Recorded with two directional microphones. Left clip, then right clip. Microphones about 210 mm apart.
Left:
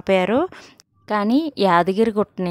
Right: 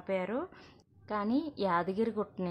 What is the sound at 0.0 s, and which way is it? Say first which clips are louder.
A woman's voice: left 16 dB; 50° left (ahead or behind).